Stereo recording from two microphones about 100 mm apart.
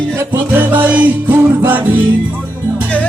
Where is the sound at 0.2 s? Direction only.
20° right (ahead or behind).